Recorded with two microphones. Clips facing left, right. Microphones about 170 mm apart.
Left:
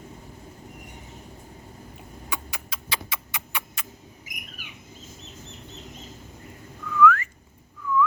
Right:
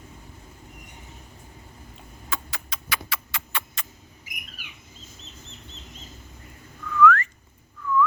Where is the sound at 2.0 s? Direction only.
15° left (ahead or behind).